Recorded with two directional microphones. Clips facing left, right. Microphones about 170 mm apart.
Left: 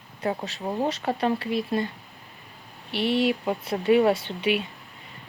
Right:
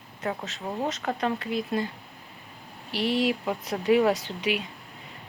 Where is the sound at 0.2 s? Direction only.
35° left (ahead or behind).